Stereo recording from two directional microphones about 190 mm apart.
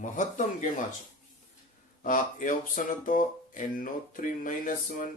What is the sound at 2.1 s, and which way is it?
Speech, 45° left (ahead or behind).